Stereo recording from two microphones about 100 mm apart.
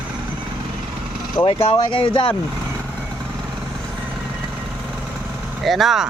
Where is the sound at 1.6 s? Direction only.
55° left (ahead or behind).